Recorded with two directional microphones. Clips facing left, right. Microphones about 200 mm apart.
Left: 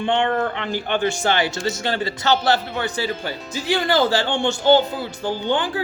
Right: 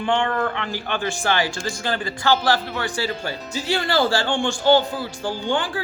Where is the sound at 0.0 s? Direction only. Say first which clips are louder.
Left 2 dB; 25° left (ahead or behind).